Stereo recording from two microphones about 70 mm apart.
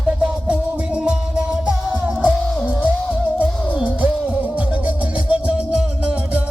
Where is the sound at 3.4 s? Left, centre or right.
Right.